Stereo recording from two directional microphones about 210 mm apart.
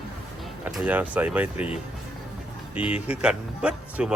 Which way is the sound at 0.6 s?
5° right (ahead or behind).